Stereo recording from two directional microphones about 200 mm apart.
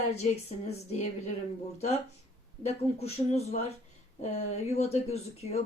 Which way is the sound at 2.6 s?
30° left (ahead or behind).